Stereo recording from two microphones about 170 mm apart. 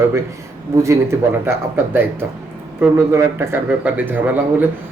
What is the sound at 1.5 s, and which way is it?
Speech, 10° right (ahead or behind).